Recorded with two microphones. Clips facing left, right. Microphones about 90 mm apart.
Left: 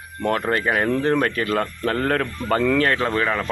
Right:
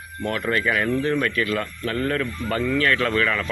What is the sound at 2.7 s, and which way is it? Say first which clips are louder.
Speech: left 1 dB; 35° left (ahead or behind).